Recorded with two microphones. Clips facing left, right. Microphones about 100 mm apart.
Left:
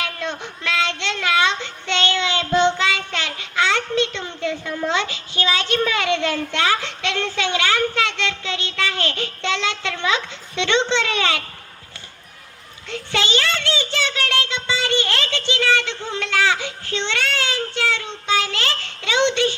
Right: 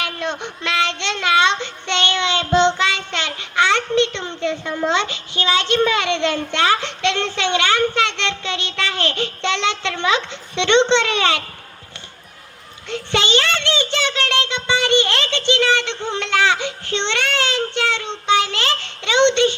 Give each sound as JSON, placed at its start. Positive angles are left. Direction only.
{"t": 0.0, "sound": "a sound", "side_deg": -25}
{"t": 0.6, "sound": "child singing", "side_deg": -25}
{"t": 12.9, "sound": "a child's voice", "side_deg": -20}